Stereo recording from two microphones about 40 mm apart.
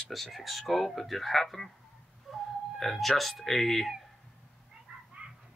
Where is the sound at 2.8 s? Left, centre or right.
Centre.